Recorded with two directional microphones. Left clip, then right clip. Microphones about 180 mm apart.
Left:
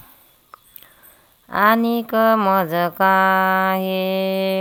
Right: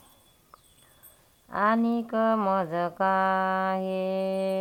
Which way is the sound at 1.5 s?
35° left (ahead or behind).